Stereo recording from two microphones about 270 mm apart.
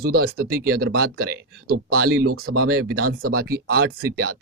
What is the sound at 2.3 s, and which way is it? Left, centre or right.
Speech, right.